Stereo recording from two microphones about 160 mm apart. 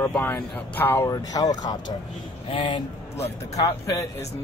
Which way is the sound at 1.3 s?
25° left (ahead or behind).